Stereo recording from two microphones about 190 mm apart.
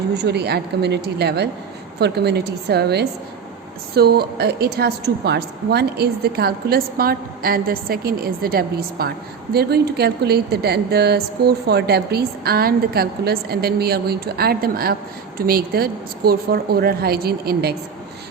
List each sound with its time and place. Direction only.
0.1 s a woman's voice: 60° right (ahead or behind)